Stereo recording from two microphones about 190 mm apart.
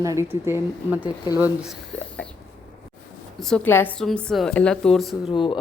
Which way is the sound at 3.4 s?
5° left (ahead or behind).